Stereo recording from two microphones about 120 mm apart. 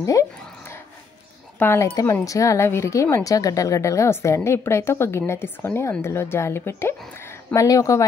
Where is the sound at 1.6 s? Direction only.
25° left (ahead or behind).